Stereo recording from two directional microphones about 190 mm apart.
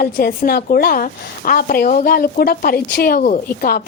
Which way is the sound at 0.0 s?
50° left (ahead or behind).